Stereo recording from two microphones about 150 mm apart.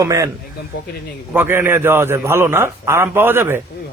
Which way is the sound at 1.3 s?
15° right (ahead or behind).